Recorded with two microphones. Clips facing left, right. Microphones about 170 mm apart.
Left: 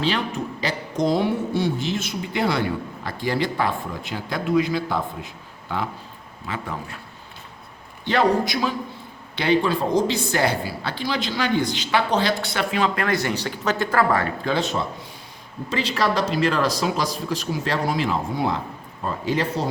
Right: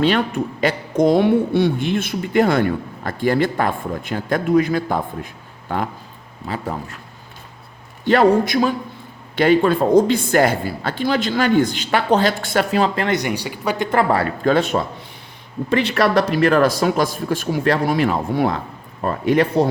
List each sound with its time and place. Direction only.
0.0 s speech: 55° right (ahead or behind)
8.0 s speech: 50° right (ahead or behind)
13.1 s speech: 15° right (ahead or behind)
13.9 s speech: 30° right (ahead or behind)
14.4 s speech: 55° right (ahead or behind)